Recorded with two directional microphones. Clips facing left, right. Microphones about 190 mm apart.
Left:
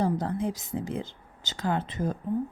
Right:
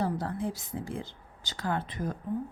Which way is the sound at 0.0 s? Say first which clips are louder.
Left 4 dB; 20° left (ahead or behind).